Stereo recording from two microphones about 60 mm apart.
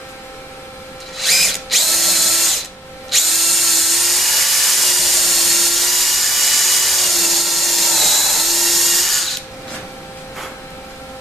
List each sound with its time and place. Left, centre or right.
1.1 s drill: centre